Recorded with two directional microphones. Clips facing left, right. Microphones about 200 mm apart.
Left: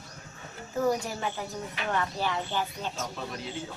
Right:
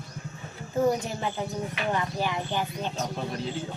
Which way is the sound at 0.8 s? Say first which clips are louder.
Right 3 dB; 20° right (ahead or behind).